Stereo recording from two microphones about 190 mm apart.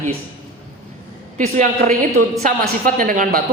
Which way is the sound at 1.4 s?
40° right (ahead or behind).